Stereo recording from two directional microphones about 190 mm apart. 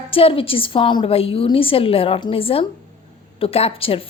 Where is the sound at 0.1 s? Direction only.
30° left (ahead or behind).